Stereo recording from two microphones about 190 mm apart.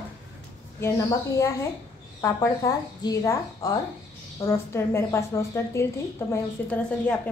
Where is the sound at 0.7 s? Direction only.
15° left (ahead or behind).